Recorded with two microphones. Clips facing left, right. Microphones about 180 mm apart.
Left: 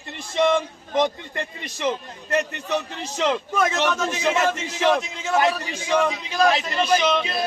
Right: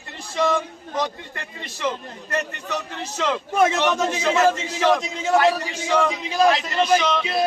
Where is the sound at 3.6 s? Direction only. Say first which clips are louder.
Right 5 dB; 30° right (ahead or behind).